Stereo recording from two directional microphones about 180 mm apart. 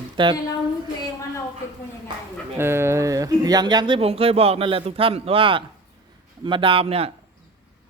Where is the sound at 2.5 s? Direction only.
15° right (ahead or behind); by 7.1 s 30° right (ahead or behind).